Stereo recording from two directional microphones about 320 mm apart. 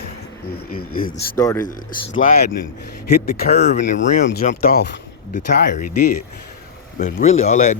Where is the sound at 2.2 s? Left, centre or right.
Left.